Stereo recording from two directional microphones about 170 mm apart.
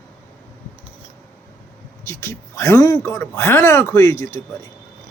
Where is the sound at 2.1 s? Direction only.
15° left (ahead or behind).